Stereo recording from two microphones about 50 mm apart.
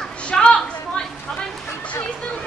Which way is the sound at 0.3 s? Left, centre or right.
Left.